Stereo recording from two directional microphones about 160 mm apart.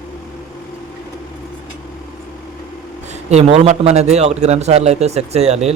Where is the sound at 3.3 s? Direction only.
40° right (ahead or behind).